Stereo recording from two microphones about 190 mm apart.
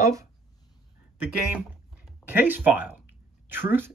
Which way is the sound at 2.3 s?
10° right (ahead or behind).